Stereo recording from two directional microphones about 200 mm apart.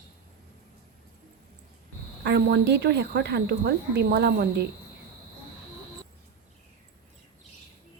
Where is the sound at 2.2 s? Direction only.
55° right (ahead or behind).